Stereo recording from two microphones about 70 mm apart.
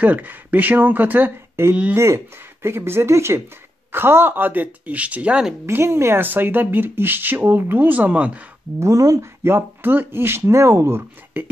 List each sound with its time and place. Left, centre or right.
0.0 s speech: right
1.6 s speech: right; by 5.5 s centre
5.7 s speech: right; by 8.5 s centre
8.7 s speech: right